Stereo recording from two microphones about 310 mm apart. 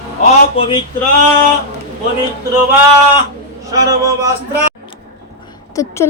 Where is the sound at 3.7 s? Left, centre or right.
Centre.